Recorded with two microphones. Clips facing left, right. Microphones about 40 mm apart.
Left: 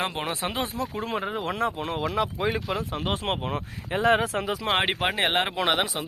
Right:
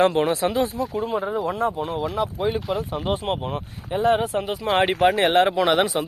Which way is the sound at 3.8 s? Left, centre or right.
Left.